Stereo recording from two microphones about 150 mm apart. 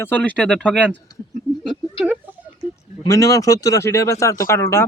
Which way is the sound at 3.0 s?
20° left (ahead or behind).